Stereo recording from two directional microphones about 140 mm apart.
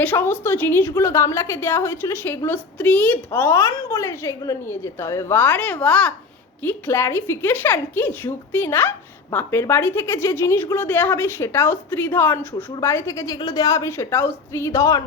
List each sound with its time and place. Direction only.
0.0 s a woman's voice: 15° left (ahead or behind)